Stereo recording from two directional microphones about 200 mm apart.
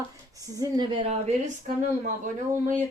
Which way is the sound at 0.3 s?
20° right (ahead or behind).